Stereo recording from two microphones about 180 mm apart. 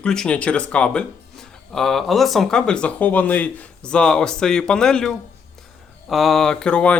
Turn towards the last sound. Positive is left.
turn(degrees=5)  # may be behind; listen again after turning